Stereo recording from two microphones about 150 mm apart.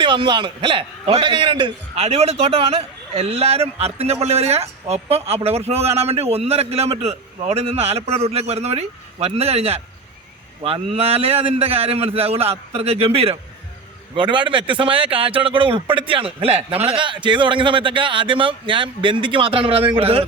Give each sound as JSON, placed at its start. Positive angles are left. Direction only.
{"t": 0.0, "sound": "a man's voice", "side_deg": -35}